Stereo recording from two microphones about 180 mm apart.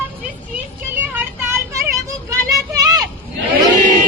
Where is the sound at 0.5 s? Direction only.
10° right (ahead or behind).